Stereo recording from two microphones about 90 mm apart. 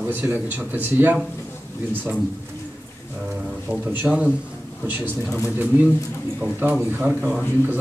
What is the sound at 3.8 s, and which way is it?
Speech, 15° right (ahead or behind).